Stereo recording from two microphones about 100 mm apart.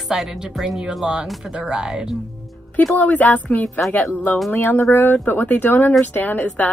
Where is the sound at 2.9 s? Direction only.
15° left (ahead or behind).